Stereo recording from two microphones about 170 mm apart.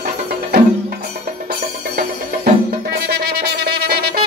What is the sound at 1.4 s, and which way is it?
Music, 65° right (ahead or behind).